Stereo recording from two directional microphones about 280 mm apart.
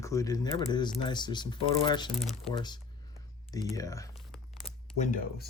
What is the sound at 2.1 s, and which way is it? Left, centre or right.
Speech, centre.